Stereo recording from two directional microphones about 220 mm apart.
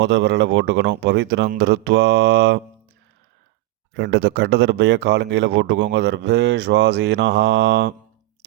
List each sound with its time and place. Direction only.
0.0 s speech: 55° right (ahead or behind)
1.5 s mantra: 50° right (ahead or behind)
3.9 s speech: 50° right (ahead or behind)